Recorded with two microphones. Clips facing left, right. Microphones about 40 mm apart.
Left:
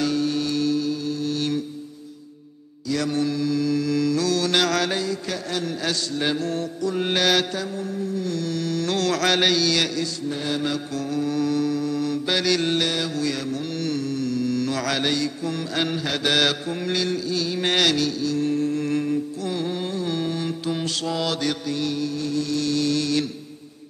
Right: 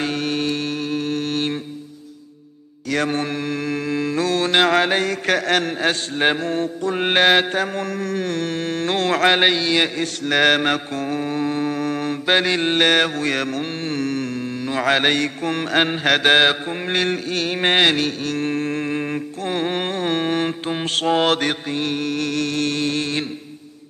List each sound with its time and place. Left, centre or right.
0.0 s music: right
2.9 s mantra: right
5.0 s mantra: right
7.6 s mantra: right
10.2 s mantra: right
12.8 s mantra: right
15.0 s mantra: right
16.3 s mantra: right